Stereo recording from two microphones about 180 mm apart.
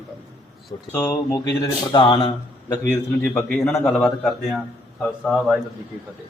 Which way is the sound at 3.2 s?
5° left (ahead or behind).